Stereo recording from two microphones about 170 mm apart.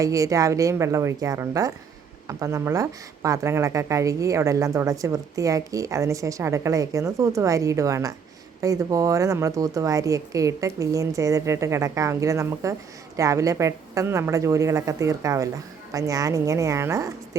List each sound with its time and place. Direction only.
0.0 s speech: 20° right (ahead or behind)